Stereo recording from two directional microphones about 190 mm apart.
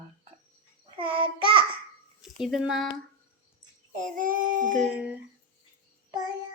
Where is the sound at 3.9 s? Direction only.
45° right (ahead or behind).